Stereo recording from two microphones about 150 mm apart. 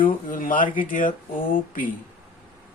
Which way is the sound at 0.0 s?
65° left (ahead or behind).